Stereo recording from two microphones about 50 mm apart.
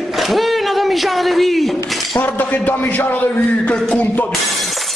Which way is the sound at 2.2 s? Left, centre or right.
Left.